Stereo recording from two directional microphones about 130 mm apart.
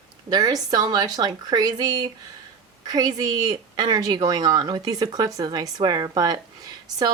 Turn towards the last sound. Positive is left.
turn(degrees=-30)  # may be behind; listen again after turning